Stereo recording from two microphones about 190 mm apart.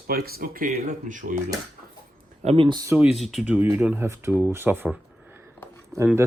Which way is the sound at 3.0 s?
5° right (ahead or behind).